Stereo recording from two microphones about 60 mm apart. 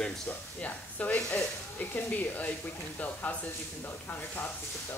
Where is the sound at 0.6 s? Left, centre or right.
Left.